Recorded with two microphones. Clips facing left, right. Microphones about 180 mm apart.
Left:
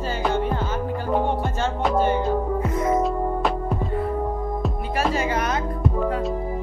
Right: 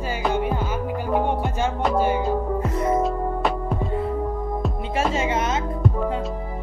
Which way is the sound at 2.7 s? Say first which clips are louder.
Even; 35° right (ahead or behind).